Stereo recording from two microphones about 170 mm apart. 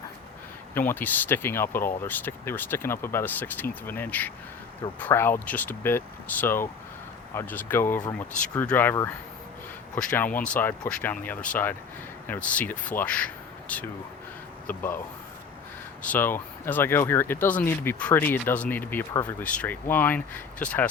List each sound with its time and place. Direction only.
0.7 s speech: 10° left (ahead or behind)
16.0 s speech: 10° left (ahead or behind)